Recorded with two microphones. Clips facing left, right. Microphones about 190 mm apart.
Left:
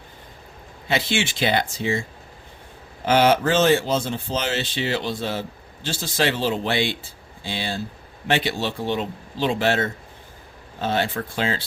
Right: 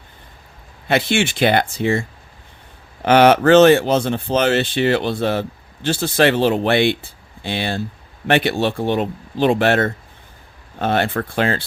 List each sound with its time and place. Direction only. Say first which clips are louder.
0.9 s speech: right 5 dB; 55° right (ahead or behind)